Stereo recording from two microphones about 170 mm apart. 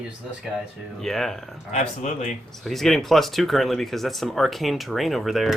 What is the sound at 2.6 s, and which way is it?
Speech, centre (ahead or behind).